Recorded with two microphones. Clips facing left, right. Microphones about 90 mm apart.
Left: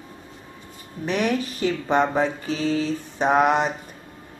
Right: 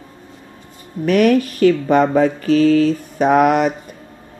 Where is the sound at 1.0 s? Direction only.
80° right.